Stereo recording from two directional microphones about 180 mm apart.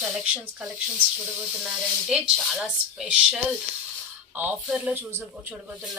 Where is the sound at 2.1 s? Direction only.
Centre (ahead or behind).